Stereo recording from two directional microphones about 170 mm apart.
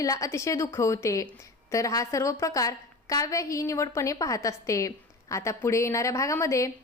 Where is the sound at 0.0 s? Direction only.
20° left (ahead or behind).